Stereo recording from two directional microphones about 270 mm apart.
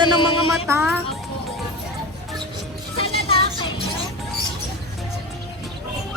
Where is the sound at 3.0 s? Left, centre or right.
Centre.